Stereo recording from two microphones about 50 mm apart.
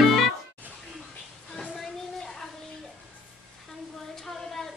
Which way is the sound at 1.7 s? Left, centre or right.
Centre.